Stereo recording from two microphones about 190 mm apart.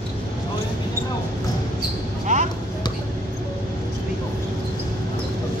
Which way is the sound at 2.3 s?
40° right (ahead or behind).